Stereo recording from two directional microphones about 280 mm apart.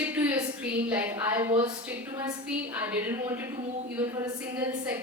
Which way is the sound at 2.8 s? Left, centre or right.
Centre.